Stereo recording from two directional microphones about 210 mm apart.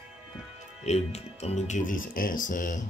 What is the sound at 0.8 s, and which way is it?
Speech, 30° left (ahead or behind).